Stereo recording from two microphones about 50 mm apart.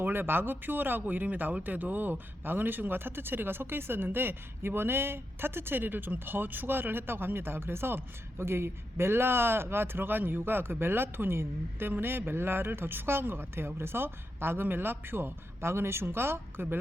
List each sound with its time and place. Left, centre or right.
0.0 s speech: right